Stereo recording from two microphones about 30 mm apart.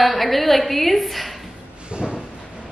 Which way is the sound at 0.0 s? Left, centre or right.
Centre.